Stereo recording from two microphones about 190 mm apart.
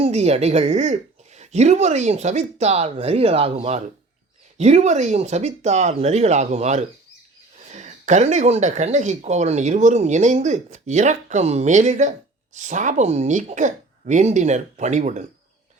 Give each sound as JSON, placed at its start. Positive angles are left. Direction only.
{"t": 0.0, "sound": "speech", "side_deg": -35}